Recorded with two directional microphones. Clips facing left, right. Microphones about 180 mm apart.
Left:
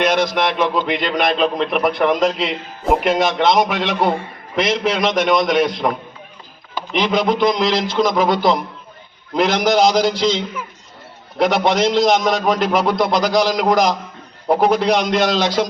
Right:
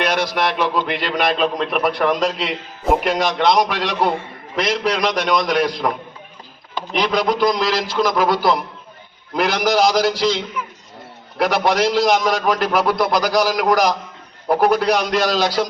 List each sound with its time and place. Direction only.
0.0 s a man's voice: centre (ahead or behind)
7.6 s a man's voice: 20° left (ahead or behind)
7.9 s a man's voice: centre (ahead or behind)